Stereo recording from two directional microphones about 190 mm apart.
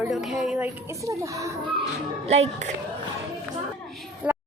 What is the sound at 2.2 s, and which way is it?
Speech, 35° right (ahead or behind).